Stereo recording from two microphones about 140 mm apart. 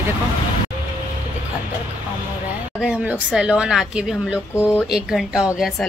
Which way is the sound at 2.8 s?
10° right (ahead or behind).